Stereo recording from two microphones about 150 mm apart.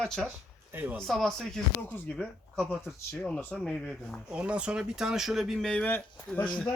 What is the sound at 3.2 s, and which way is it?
Speech, 10° left (ahead or behind).